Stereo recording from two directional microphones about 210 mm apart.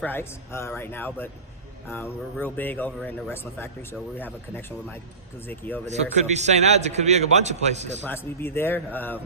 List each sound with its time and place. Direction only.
0.0 s speech: 10° left (ahead or behind)
5.8 s a man's voice: 30° right (ahead or behind)
8.0 s speech: 10° left (ahead or behind)